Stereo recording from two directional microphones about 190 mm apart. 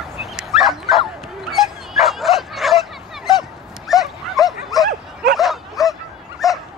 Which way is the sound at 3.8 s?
Centre (ahead or behind).